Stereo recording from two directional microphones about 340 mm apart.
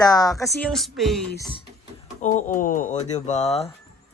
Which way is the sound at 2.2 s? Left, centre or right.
Left.